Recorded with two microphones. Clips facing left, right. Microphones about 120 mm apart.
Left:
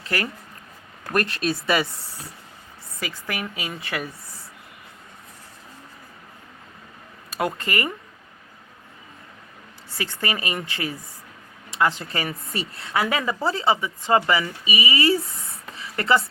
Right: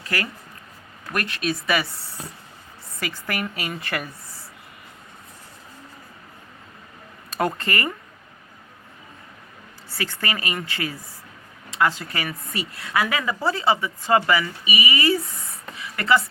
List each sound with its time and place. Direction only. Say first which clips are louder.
0.0 s speech: left 1 dB; 25° left (ahead or behind)
1.1 s speech: left 3 dB; 40° left (ahead or behind)
3.0 s a woman's voice: right 2 dB; centre (ahead or behind)
7.3 s speech: right 2 dB; 5° left (ahead or behind)
10.0 s speech: even; 20° left (ahead or behind)
15.8 s a sound: even; 30° left (ahead or behind)